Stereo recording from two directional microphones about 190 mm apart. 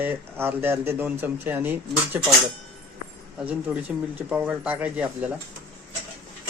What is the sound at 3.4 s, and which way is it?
Speech, 10° right (ahead or behind).